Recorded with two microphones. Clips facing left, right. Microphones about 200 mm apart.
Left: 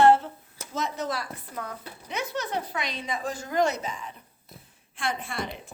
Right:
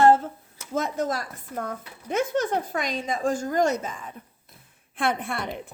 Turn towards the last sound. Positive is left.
turn(degrees=-60)  # may be behind; listen again after turning